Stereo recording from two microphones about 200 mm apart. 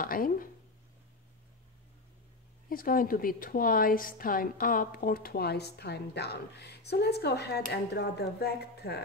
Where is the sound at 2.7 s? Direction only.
45° left (ahead or behind).